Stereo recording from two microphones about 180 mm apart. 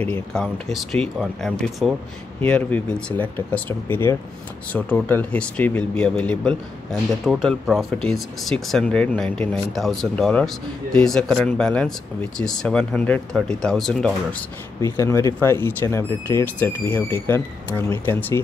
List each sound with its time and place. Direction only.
0.0 s speech: 5° left (ahead or behind)
14.8 s speech: 15° left (ahead or behind)